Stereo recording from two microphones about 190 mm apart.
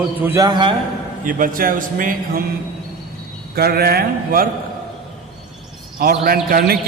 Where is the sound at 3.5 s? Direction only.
55° right (ahead or behind).